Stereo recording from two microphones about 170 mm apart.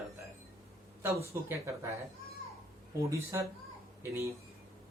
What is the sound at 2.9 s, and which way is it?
Speech, 15° right (ahead or behind).